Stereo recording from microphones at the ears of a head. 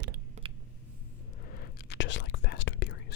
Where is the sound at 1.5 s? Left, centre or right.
Left.